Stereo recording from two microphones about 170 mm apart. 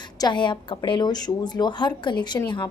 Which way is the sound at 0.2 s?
25° left (ahead or behind).